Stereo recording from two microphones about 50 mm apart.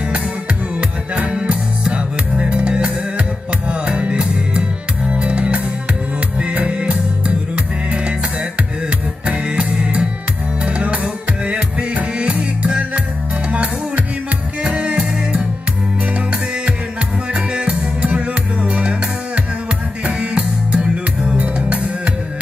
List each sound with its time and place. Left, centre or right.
0.7 s music: right
9.2 s music: right
17.3 s music: right